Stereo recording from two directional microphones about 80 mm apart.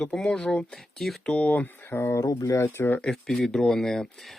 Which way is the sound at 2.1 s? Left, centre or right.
Left.